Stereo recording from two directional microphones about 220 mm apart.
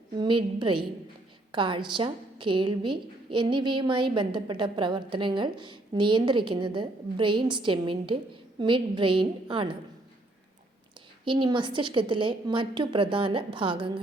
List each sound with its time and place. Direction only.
0.2 s a woman's voice: 20° right (ahead or behind)
11.3 s a woman's voice: 20° right (ahead or behind)